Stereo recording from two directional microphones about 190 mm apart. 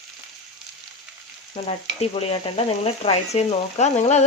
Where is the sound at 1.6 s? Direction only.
30° left (ahead or behind).